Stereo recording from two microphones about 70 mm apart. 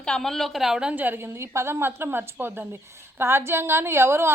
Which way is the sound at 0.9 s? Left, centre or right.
Right.